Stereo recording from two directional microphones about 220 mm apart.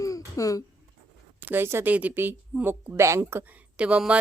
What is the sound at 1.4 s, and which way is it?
Speech, 10° right (ahead or behind).